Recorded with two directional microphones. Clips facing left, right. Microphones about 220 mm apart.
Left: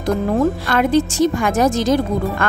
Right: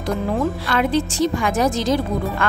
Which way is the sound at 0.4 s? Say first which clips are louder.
Left 4 dB; 45° left (ahead or behind).